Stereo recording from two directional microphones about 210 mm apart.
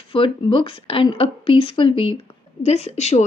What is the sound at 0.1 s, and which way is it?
A woman's voice, 25° left (ahead or behind).